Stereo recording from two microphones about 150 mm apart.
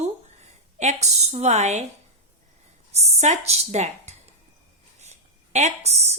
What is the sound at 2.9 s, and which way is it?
Speech, 45° right (ahead or behind).